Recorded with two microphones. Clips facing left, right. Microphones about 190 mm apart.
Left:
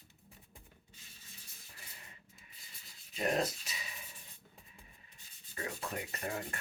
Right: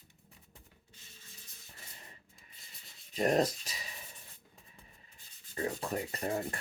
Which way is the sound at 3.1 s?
40° right (ahead or behind).